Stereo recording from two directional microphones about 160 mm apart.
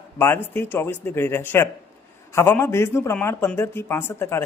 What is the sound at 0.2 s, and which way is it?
Speech, 15° left (ahead or behind).